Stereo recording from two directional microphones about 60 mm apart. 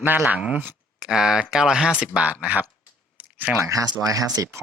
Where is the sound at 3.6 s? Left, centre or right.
Right.